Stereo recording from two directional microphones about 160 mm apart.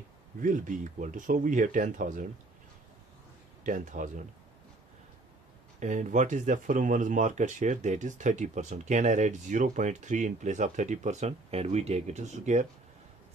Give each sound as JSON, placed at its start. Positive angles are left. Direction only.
{"t": 0.4, "sound": "speech", "side_deg": -55}
{"t": 3.6, "sound": "speech", "side_deg": -55}
{"t": 5.8, "sound": "speech", "side_deg": -50}